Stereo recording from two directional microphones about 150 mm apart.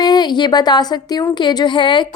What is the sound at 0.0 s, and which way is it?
Speech, 30° left (ahead or behind).